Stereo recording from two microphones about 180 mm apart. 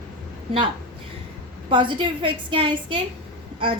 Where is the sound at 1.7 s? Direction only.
25° right (ahead or behind).